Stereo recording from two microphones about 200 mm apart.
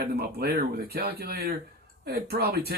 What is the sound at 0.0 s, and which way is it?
Speech, 50° right (ahead or behind).